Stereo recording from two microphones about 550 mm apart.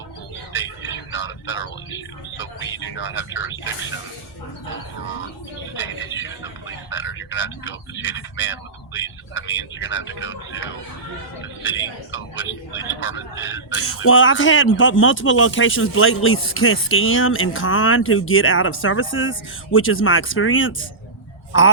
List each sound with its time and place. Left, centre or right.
0.5 s a sound: left
2.7 s speech: left
5.7 s speech: left